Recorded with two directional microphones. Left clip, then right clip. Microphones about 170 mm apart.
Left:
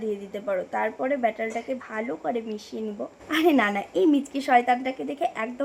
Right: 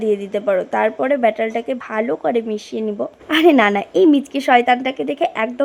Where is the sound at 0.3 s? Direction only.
35° right (ahead or behind).